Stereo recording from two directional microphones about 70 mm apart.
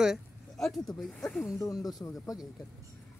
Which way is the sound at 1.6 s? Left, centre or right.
Left.